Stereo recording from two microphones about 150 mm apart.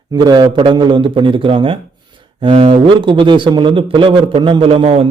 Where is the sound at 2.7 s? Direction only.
35° right (ahead or behind).